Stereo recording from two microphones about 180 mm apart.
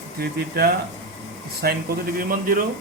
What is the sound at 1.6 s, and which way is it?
Speech, 60° right (ahead or behind).